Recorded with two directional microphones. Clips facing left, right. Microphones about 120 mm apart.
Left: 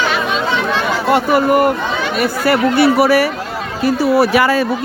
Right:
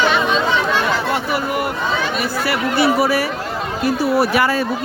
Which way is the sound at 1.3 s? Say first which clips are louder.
Left 9 dB; 45° left (ahead or behind).